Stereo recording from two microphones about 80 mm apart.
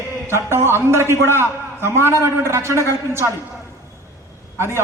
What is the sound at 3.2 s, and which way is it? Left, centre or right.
Speech, right.